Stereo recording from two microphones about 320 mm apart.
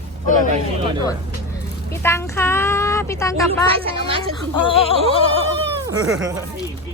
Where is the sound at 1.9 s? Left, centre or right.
Centre.